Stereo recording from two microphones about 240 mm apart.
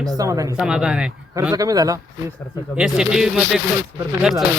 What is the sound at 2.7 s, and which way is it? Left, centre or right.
Speech, centre.